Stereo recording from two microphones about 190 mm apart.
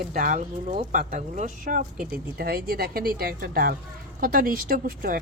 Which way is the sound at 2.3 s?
55° right (ahead or behind).